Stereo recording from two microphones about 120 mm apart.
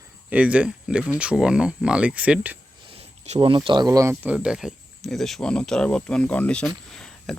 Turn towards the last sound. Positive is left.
turn(degrees=0)  # may be behind; listen again after turning